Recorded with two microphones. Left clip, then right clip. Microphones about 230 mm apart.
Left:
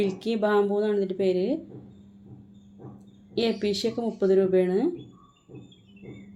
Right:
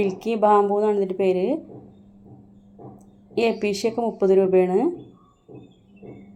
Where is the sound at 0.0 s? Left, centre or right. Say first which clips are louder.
Right 6 dB; centre.